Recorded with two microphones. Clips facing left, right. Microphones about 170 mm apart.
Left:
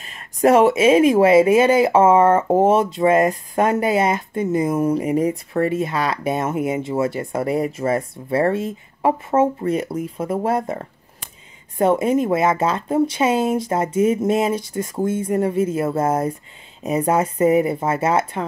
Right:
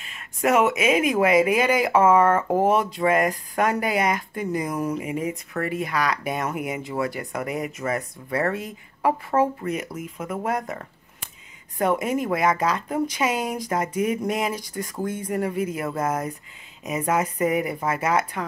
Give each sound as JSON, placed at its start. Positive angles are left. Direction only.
{"t": 0.0, "sound": "speech", "side_deg": 40}